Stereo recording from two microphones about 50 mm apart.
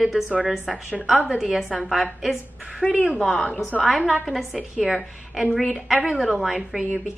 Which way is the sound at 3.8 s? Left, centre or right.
Centre.